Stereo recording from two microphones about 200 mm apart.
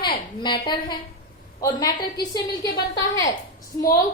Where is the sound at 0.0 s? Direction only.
20° left (ahead or behind).